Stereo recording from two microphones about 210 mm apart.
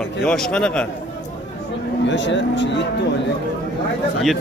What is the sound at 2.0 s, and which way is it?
Speech, 60° left (ahead or behind).